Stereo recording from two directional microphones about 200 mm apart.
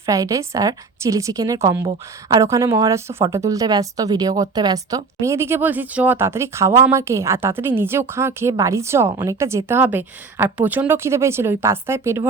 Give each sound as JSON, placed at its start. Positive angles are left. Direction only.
{"t": 0.0, "sound": "speech", "side_deg": -15}